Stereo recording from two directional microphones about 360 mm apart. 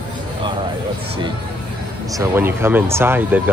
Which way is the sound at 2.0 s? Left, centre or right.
Centre.